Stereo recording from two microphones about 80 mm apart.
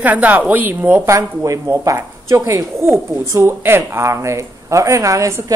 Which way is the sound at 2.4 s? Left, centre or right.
Right.